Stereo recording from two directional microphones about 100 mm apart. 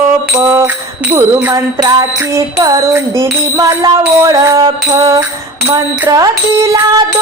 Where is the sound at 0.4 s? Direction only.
25° right (ahead or behind).